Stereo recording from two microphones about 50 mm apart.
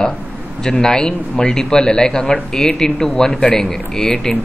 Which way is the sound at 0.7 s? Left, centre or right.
Centre.